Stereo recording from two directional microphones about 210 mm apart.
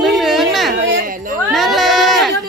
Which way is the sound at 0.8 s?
50° right (ahead or behind).